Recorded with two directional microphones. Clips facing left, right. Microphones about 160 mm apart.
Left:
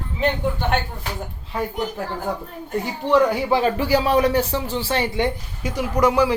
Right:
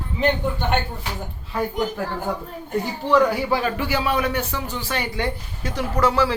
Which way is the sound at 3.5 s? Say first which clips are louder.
Left 4 dB; 25° left (ahead or behind).